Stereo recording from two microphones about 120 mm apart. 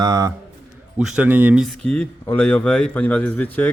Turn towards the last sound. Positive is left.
turn(degrees=15)  # may be behind; listen again after turning